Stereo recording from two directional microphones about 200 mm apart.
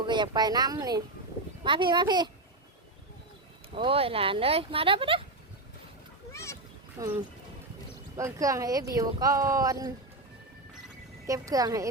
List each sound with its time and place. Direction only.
0.0 s speech: 20° right (ahead or behind)
3.8 s speech: 25° right (ahead or behind)
6.3 s speech: 15° left (ahead or behind)
7.0 s speech: 15° right (ahead or behind)
11.3 s speech: 15° right (ahead or behind)